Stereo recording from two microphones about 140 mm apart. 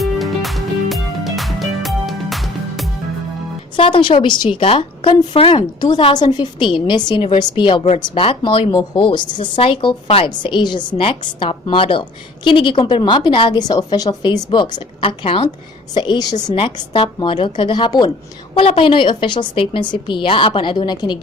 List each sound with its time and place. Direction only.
0.0 s music: centre (ahead or behind)
3.8 s speech: 35° left (ahead or behind)
18.5 s speech: 40° left (ahead or behind)